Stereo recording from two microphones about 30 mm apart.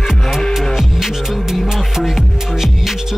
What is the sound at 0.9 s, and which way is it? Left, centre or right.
Music, centre.